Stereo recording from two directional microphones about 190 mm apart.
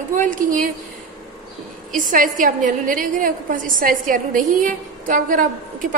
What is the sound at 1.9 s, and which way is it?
A woman's voice, 45° right (ahead or behind).